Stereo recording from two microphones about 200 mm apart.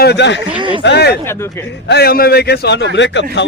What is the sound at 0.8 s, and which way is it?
Speech, 55° left (ahead or behind).